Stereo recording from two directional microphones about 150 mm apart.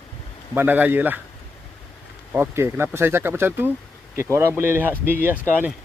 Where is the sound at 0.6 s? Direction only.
10° right (ahead or behind).